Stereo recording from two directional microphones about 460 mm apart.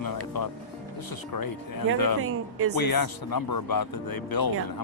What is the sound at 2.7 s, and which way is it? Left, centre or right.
Speech, left.